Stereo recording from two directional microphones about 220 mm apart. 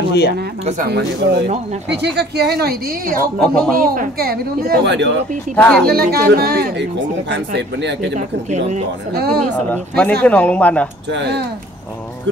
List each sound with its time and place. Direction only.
0.8 s speech: 50° right (ahead or behind)
3.3 s speech: 5° left (ahead or behind)
3.7 s speech: 40° right (ahead or behind); by 5.2 s 55° right (ahead or behind)
5.6 s speech: 5° left (ahead or behind)
5.9 s speech: 45° right (ahead or behind)
8.5 s speech: 30° right (ahead or behind)
9.1 s speech: 45° right (ahead or behind)
9.4 s speech: 5° left (ahead or behind)
11.1 s speech: 50° right (ahead or behind)